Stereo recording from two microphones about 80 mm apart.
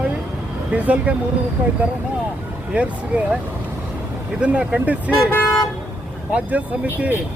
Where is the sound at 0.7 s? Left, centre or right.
Centre.